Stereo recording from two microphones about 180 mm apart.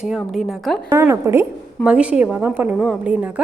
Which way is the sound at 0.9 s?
15° right (ahead or behind).